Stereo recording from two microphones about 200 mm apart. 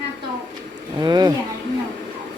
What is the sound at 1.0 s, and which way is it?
Speech, 20° right (ahead or behind).